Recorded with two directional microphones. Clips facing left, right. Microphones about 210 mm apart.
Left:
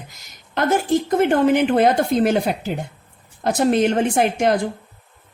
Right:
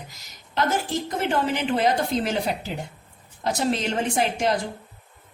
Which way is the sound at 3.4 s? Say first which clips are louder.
Left 7 dB; 55° left (ahead or behind).